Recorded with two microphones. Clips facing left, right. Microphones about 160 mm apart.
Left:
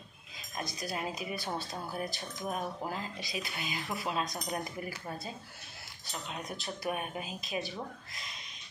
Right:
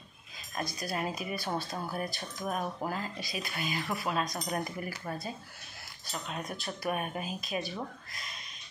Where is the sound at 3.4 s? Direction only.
50° right (ahead or behind).